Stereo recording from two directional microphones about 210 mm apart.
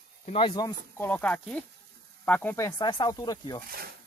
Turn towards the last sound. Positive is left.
turn(degrees=15)  # may be behind; listen again after turning